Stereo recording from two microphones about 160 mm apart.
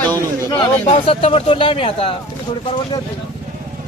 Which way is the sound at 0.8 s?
35° left (ahead or behind).